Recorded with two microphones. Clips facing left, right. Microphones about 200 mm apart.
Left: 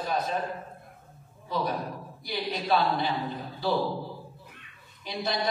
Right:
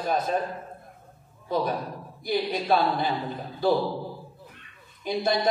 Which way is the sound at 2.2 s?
50° right (ahead or behind).